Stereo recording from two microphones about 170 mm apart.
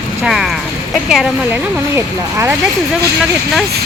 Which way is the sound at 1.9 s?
15° right (ahead or behind).